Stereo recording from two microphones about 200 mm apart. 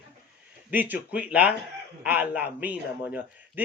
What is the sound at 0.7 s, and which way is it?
A man's voice, 10° right (ahead or behind).